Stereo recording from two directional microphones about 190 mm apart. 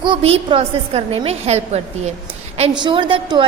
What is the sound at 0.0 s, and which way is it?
A woman's voice, 30° right (ahead or behind).